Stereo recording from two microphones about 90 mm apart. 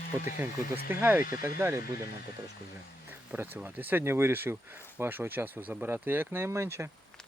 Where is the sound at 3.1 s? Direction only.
25° right (ahead or behind).